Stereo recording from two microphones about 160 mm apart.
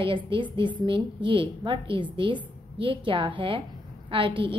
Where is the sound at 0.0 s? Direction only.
30° right (ahead or behind).